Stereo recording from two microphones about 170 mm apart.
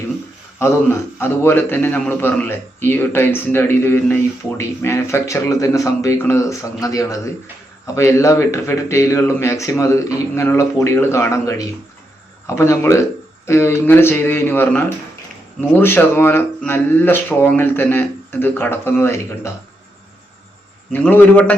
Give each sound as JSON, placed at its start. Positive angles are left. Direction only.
{"t": 0.6, "sound": "a man's voice", "side_deg": 15}
{"t": 20.9, "sound": "a man's voice", "side_deg": 10}